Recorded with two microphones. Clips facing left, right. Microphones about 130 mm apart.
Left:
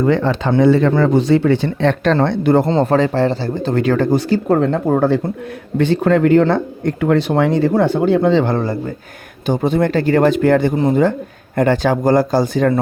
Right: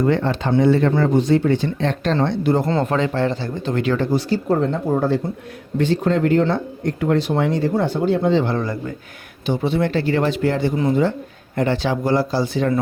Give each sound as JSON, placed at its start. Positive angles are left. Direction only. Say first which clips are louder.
{"t": 0.5, "sound": "speech", "louder": "left 3 dB", "side_deg": 90}
{"t": 2.6, "sound": "speech", "louder": "left 5 dB", "side_deg": 30}
{"t": 8.4, "sound": "speech", "louder": "left 4 dB", "side_deg": 30}
{"t": 9.5, "sound": "speech", "louder": "left 4 dB", "side_deg": 45}